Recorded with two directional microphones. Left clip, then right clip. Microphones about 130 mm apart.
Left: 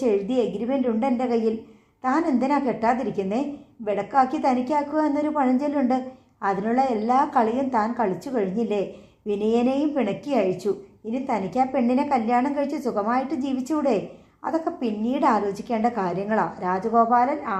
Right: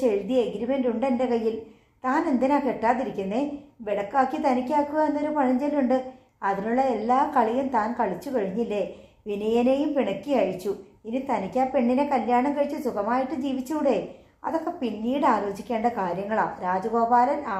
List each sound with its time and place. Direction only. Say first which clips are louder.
0.0 s a woman's voice: left 1 dB; 40° left (ahead or behind)